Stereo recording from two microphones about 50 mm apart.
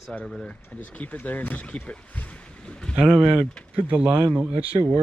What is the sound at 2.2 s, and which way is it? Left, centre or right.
Boat, left.